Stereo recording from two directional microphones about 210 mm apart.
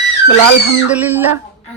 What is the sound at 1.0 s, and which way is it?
Speech, 10° right (ahead or behind).